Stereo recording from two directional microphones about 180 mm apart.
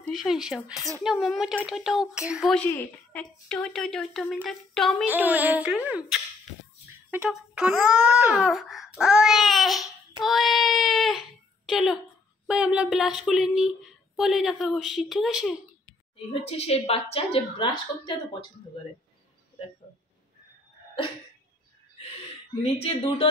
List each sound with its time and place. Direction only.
0.0 s speech: centre (ahead or behind)
16.4 s a woman's voice: 35° left (ahead or behind)
22.6 s a woman's voice: 35° left (ahead or behind)